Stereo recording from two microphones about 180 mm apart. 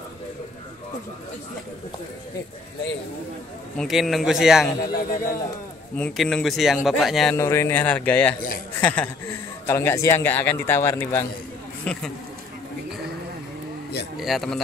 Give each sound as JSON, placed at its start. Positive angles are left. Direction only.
{"t": 3.7, "sound": "speech", "side_deg": 0}
{"t": 4.9, "sound": "a man's voice", "side_deg": 50}
{"t": 5.9, "sound": "speech", "side_deg": 5}
{"t": 7.3, "sound": "a man's voice", "side_deg": 15}
{"t": 14.1, "sound": "speech", "side_deg": 0}